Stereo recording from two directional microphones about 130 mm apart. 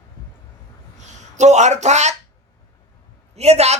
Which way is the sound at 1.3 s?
65° right (ahead or behind).